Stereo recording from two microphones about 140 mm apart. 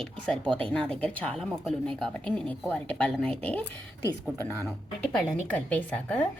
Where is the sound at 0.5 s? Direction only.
5° left (ahead or behind).